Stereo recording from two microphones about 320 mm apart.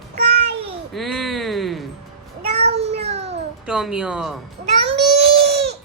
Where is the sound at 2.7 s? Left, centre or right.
Centre.